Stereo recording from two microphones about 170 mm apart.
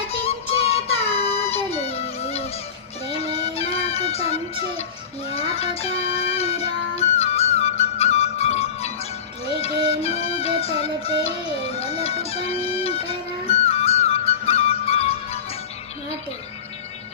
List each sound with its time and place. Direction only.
0.1 s music: 35° left (ahead or behind)